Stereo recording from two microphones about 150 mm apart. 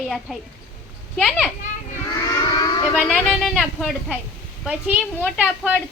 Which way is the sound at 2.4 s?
25° left (ahead or behind).